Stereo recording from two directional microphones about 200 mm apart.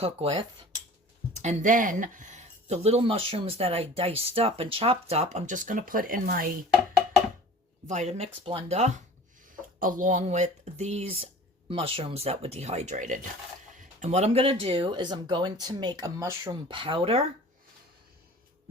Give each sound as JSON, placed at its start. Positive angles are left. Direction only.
{"t": 0.0, "sound": "speech", "side_deg": -30}
{"t": 7.9, "sound": "speech", "side_deg": -35}